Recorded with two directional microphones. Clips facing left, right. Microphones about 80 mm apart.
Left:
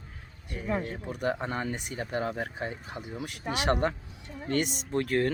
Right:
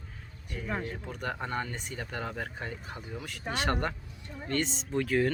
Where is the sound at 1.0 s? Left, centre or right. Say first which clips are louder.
Left 5 dB; centre.